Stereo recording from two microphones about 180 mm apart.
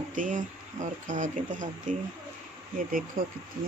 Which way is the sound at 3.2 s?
50° right (ahead or behind).